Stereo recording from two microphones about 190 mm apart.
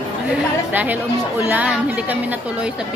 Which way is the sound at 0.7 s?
10° right (ahead or behind).